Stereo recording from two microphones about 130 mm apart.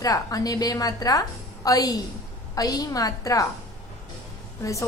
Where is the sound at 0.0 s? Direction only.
25° left (ahead or behind).